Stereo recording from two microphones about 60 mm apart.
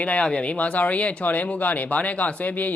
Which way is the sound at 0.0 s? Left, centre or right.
Left.